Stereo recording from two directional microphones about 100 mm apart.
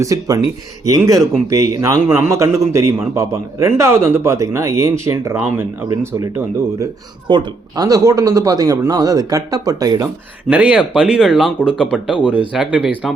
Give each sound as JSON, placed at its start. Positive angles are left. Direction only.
{"t": 0.0, "sound": "a man's voice", "side_deg": -35}
{"t": 7.3, "sound": "speech", "side_deg": -50}
{"t": 7.9, "sound": "speech", "side_deg": -35}
{"t": 10.5, "sound": "speech", "side_deg": -10}